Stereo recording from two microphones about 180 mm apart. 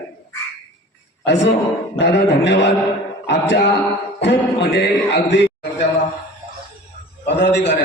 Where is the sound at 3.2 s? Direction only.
80° left.